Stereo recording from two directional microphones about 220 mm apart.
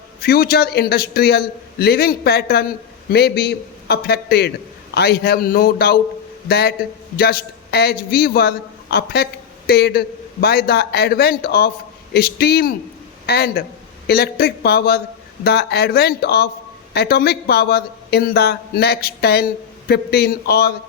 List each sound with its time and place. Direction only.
0.2 s a man's voice: 45° left (ahead or behind)